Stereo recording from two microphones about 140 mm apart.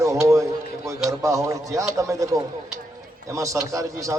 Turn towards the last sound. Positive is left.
turn(degrees=-25)  # may be behind; listen again after turning